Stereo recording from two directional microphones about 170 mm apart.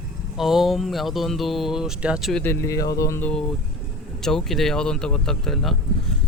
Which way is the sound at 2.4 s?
15° left (ahead or behind).